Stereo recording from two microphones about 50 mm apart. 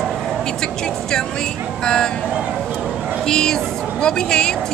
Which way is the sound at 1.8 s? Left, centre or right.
Centre.